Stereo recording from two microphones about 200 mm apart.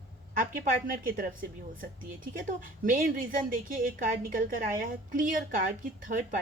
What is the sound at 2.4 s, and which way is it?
A woman's voice, 45° right (ahead or behind).